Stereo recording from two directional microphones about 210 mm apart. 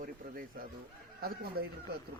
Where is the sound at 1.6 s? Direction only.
45° right (ahead or behind).